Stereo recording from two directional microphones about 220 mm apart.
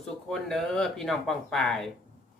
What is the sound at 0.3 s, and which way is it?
Speech, centre (ahead or behind).